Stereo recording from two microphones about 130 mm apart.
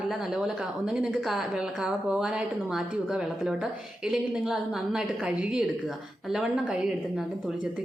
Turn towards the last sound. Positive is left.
turn(degrees=-5)  # may be behind; listen again after turning